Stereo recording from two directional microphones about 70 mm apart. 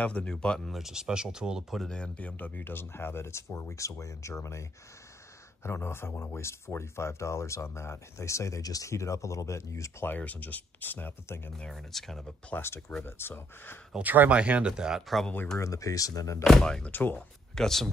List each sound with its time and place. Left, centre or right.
0.0 s speech: centre
0.7 s speech: centre
1.8 s speech: centre; by 10.0 s left
10.0 s speech: left
11.5 s speech: centre
12.5 s speech: left
13.9 s speech: right; by 15.2 s centre
15.5 s speech: left
16.4 s speech: centre
16.9 s speech: left
17.6 s speech: centre